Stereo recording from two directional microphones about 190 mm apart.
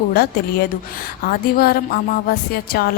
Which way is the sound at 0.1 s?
50° left (ahead or behind).